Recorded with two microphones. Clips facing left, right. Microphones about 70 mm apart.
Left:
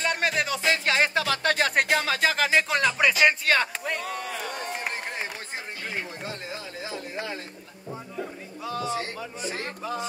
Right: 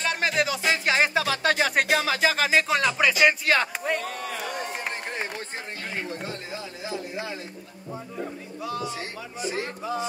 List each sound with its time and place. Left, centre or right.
0.0 s music: centre
6.9 s a sound: left
8.6 s music: left